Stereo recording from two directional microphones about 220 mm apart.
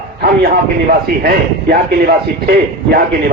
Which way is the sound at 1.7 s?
45° right (ahead or behind).